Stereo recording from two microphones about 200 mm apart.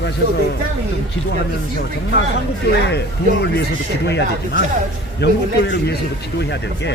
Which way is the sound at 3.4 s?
55° left (ahead or behind).